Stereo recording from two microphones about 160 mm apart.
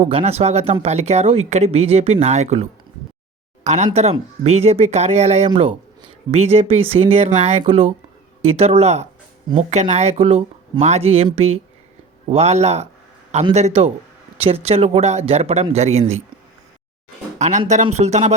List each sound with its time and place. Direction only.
0.0 s speech: 40° right (ahead or behind)
17.3 s speech: 45° right (ahead or behind)